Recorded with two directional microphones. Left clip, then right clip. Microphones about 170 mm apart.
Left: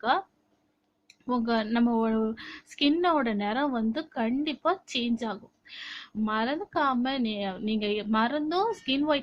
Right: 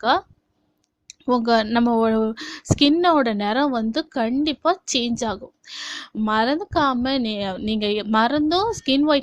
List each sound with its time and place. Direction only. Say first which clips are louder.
0.0 s a woman's voice: right 7 dB; 50° right (ahead or behind)